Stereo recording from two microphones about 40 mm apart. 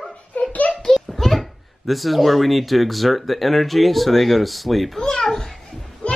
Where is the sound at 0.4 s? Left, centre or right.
Left.